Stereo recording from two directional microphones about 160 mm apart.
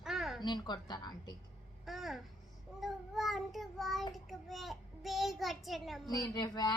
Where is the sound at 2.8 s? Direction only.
Centre (ahead or behind).